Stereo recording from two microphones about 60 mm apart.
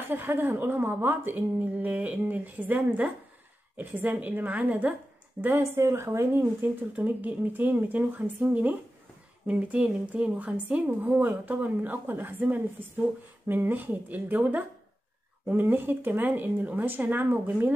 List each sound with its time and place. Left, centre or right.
0.1 s a woman's voice: right
5.6 s a woman's voice: right
6.4 s a woman's voice: right